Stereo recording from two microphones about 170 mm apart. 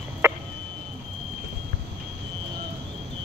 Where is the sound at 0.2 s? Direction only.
15° right (ahead or behind).